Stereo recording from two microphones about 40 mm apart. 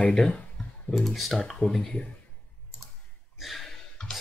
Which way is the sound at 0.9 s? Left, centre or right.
Left.